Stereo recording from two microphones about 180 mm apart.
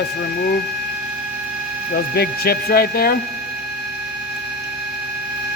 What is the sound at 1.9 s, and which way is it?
A man's voice, 60° left (ahead or behind).